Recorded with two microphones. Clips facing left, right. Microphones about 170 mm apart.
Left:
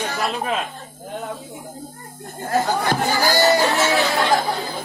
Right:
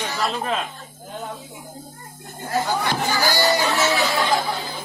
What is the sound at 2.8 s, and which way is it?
Speech, 50° left (ahead or behind).